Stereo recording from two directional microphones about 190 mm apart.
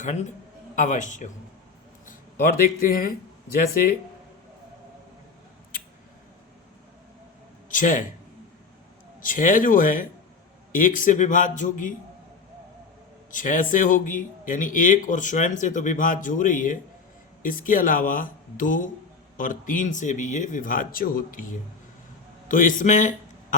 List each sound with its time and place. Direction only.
0.0 s a man's voice: 40° left (ahead or behind)
7.7 s speech: 45° left (ahead or behind)
9.2 s speech: 45° left (ahead or behind)
13.3 s a man's voice: 45° left (ahead or behind)